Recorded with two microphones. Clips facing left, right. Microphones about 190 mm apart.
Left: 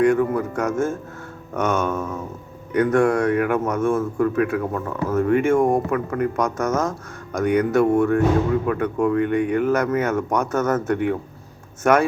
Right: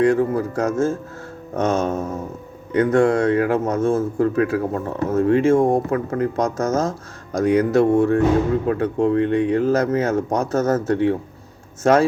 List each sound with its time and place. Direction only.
0.0 s speech: 30° right (ahead or behind)